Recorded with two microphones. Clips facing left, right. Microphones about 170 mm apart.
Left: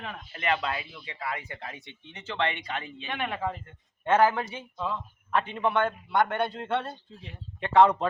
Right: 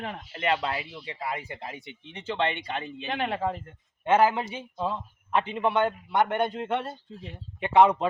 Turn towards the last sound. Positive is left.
turn(degrees=-15)  # may be behind; listen again after turning